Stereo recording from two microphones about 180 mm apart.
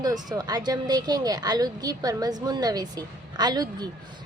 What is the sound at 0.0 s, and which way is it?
A woman's voice, 20° right (ahead or behind).